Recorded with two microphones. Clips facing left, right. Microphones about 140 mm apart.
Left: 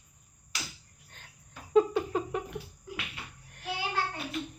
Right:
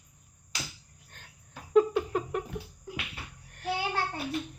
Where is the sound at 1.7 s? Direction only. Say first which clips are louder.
Right 1 dB; centre (ahead or behind).